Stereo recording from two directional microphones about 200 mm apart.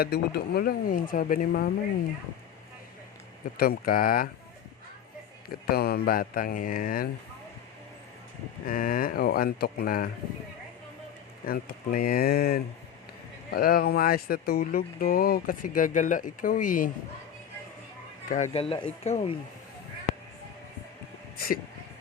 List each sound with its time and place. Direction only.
0.0 s speech: 55° left (ahead or behind)
3.6 s speech: 45° left (ahead or behind)
5.6 s speech: 50° left (ahead or behind)
8.6 s speech: 45° left (ahead or behind)
11.4 s speech: 45° left (ahead or behind)
18.3 s speech: 35° left (ahead or behind)
21.3 s speech: 50° left (ahead or behind)